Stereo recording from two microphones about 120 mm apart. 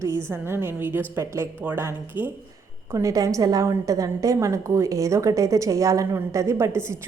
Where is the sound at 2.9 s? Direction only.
30° right (ahead or behind).